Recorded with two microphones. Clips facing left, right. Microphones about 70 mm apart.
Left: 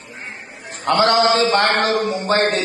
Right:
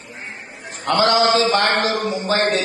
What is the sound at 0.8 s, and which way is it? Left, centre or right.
Speech, left.